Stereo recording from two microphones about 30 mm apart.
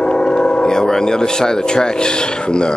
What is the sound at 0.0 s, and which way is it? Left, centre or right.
Speech, left.